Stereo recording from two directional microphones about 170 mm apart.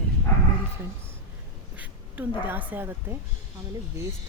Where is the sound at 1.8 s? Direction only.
10° right (ahead or behind).